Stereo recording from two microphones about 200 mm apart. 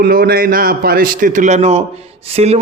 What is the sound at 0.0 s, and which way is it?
A man's voice, 50° right (ahead or behind).